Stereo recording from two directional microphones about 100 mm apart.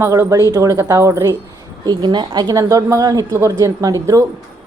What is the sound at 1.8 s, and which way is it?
A woman's voice, 45° right (ahead or behind).